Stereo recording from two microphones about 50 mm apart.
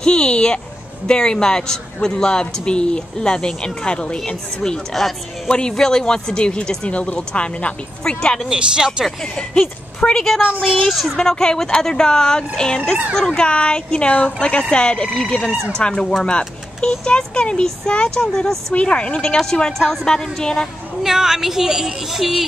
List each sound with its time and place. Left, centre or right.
0.0 s speech: centre
4.6 s a woman's voice: centre
5.5 s speech: centre
8.5 s a woman's voice: centre
9.2 s a woman's voice: centre
11.1 s speech: centre
13.4 s speech: centre
15.5 s speech: right
15.8 s speech: centre
21.0 s a woman's voice: centre